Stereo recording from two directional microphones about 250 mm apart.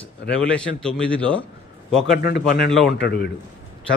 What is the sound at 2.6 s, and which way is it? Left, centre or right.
Speech, centre.